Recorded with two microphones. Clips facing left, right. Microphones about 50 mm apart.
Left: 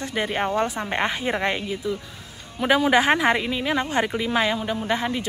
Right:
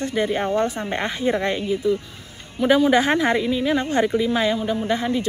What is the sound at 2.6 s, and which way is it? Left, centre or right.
A woman's voice, left.